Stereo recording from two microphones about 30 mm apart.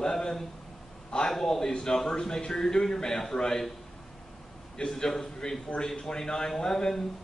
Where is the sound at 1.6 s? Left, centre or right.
Left.